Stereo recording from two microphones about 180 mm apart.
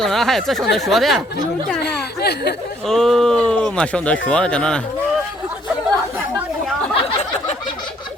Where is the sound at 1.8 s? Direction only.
65° left (ahead or behind).